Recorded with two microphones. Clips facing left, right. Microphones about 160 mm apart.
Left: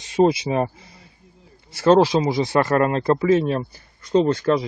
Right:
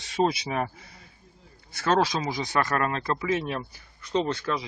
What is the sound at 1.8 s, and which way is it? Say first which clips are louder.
Speech: left 9 dB; 25° left (ahead or behind).